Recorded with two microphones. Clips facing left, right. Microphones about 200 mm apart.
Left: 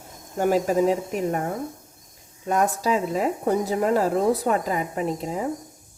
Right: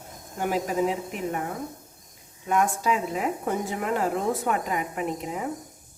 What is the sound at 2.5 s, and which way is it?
Speech, 35° left (ahead or behind).